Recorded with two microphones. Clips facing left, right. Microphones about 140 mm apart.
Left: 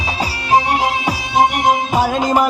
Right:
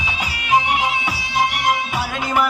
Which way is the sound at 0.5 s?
40° left (ahead or behind).